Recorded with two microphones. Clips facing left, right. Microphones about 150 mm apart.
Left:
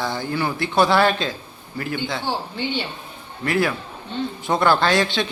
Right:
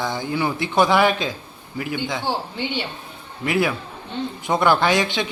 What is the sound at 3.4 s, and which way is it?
Speech, 15° right (ahead or behind).